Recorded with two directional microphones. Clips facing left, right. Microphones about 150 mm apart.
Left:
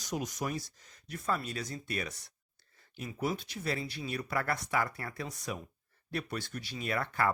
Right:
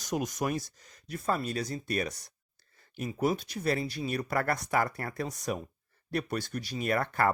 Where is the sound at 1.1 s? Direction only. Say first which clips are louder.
Right 4 dB; 40° right (ahead or behind).